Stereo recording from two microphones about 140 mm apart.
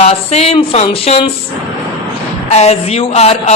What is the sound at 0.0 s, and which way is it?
A woman's voice, 50° left (ahead or behind).